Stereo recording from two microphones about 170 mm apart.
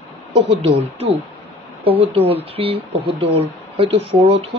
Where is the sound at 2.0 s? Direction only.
35° right (ahead or behind).